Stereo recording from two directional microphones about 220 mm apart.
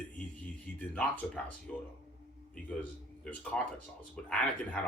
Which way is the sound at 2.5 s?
5° left (ahead or behind).